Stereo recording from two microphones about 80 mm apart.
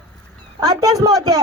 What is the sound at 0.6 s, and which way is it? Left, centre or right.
Speech, right.